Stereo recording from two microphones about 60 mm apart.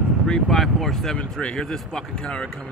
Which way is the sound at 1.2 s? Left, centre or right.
Centre.